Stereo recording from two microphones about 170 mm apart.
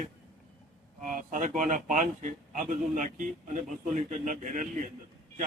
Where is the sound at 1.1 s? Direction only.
50° right (ahead or behind).